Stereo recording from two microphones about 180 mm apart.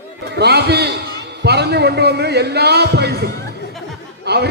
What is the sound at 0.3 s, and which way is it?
A man's voice, 65° right (ahead or behind).